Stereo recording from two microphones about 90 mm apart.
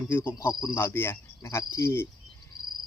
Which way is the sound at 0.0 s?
25° left (ahead or behind).